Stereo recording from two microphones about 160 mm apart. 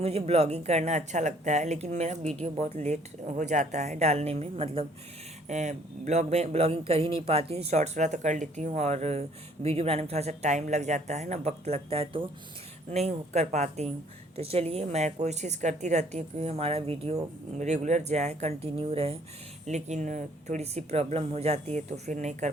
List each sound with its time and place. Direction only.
0.0 s speech: 40° right (ahead or behind)
5.5 s speech: 45° right (ahead or behind)